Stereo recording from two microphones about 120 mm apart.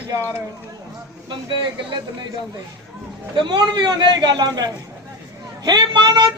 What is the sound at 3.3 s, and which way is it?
A man's voice, 40° right (ahead or behind).